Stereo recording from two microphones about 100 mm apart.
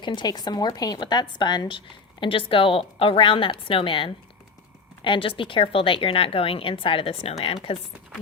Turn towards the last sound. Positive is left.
turn(degrees=70)  # may be behind; listen again after turning